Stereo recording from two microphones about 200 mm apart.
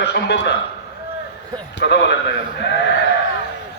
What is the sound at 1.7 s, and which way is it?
A man's voice, 60° left (ahead or behind).